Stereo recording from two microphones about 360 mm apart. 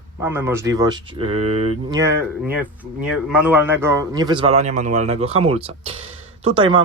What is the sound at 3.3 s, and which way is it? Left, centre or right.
A man's voice, centre.